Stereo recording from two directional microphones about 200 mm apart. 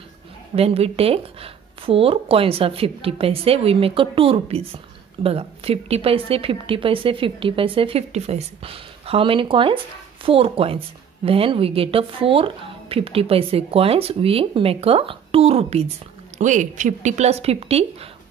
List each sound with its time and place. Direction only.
0.6 s a woman's voice: 30° right (ahead or behind)